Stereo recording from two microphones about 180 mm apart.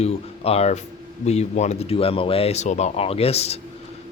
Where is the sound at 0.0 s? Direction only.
35° left (ahead or behind).